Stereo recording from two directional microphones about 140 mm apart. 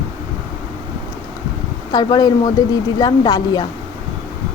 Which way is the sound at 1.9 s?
30° left (ahead or behind).